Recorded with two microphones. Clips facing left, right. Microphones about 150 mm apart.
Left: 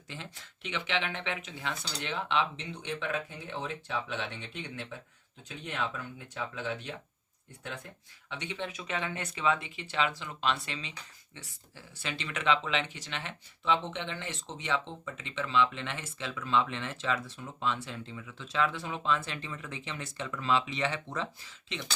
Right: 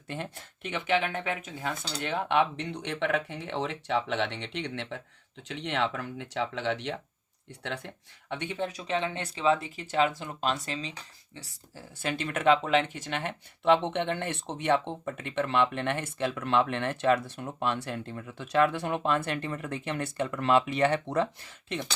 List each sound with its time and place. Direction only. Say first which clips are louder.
0.1 s speech: right 8 dB; 55° right (ahead or behind); by 7.9 s 80° right
8.3 s speech: right 5 dB; 50° right (ahead or behind)
12.0 s speech: right 6 dB; 50° right (ahead or behind)